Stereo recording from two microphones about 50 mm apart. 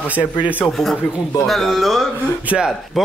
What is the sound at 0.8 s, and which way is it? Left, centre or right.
A man's voice, centre.